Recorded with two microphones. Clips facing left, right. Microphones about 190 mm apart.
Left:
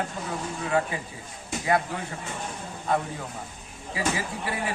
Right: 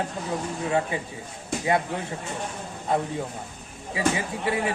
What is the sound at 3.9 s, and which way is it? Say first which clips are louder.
Speech: right 3 dB; 25° right (ahead or behind).